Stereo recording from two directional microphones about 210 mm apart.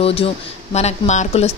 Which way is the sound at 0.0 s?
25° left (ahead or behind).